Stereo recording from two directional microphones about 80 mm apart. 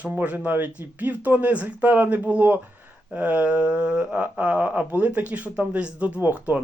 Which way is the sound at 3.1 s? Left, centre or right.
Centre.